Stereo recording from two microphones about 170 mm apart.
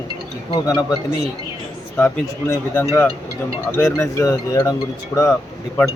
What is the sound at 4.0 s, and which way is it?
Speech, 20° left (ahead or behind).